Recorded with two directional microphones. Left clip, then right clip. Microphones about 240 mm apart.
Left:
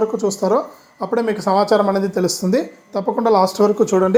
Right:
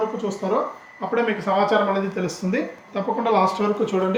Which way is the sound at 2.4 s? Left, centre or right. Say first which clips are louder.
Left 6 dB; centre.